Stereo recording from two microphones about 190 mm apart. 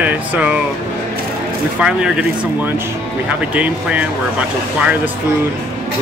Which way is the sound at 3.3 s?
5° right (ahead or behind).